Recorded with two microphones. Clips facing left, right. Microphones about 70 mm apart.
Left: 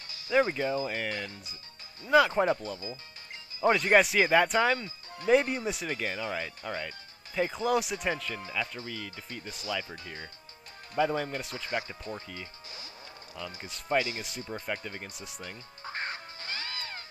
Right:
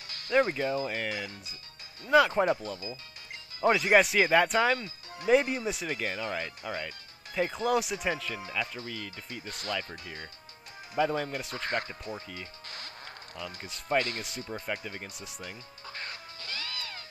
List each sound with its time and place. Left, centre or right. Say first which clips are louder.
0.3 s speech: even; centre
11.0 s speech: even; centre
11.5 s speech: right 3 dB; right
11.9 s speech: even; centre
12.6 s music: right 3 dB; right
13.6 s speech: even; centre
15.8 s music: left 6 dB; left